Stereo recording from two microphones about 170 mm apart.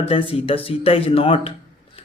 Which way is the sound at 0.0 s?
35° left (ahead or behind).